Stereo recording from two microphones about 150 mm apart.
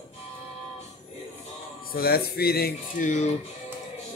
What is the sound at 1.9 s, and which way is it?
Speech, 90° left.